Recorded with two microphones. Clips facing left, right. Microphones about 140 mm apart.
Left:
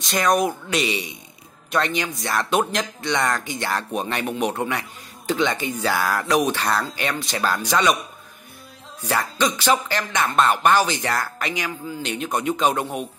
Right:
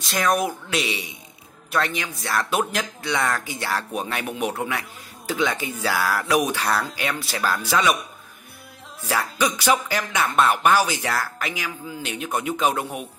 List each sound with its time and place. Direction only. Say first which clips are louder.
0.0 s speech: left 2 dB; 5° right (ahead or behind)
9.1 s speech: left 1 dB; 10° right (ahead or behind)